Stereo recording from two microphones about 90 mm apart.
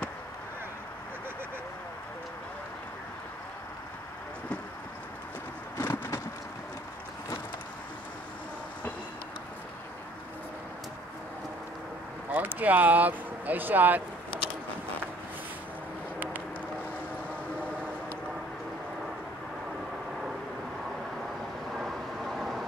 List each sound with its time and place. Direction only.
5.8 s vehicle: 30° left (ahead or behind)
12.3 s speech: 20° right (ahead or behind)
21.7 s vehicle: 5° right (ahead or behind)